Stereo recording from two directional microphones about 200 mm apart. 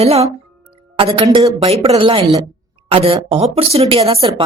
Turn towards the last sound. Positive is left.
turn(degrees=-30)  # may be behind; listen again after turning